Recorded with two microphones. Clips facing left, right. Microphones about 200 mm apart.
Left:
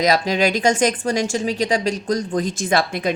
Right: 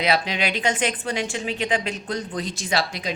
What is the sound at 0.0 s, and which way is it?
Speech, 40° left (ahead or behind).